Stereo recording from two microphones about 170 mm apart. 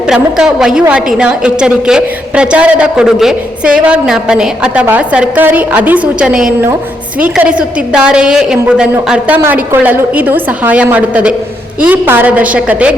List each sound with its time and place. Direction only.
0.1 s a man's voice: 5° right (ahead or behind)